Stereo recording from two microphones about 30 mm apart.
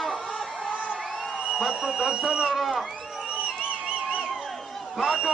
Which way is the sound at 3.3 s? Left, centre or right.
Right.